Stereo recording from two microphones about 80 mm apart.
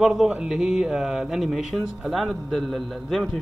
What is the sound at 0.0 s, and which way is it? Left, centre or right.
A man's voice, centre.